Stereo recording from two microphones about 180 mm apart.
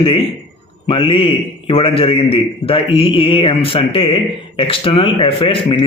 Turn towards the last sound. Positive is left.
turn(degrees=30)  # may be behind; listen again after turning